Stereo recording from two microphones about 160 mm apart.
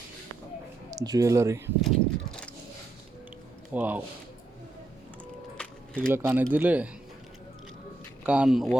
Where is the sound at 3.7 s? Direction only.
10° right (ahead or behind).